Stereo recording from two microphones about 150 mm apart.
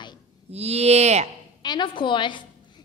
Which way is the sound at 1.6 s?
30° left (ahead or behind).